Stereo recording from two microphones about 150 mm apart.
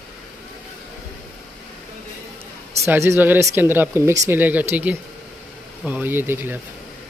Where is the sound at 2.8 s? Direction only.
15° right (ahead or behind).